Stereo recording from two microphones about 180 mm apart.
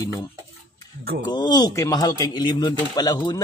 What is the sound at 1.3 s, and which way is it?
Speech, 25° left (ahead or behind).